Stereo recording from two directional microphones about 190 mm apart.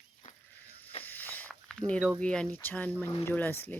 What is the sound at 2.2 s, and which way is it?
Speech, 5° left (ahead or behind).